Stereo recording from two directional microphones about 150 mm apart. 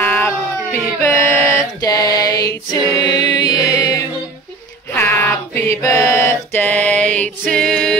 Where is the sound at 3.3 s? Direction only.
25° left (ahead or behind).